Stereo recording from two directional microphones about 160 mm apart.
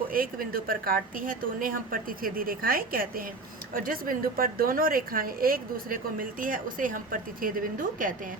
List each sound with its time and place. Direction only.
0.1 s a woman's voice: 65° right (ahead or behind)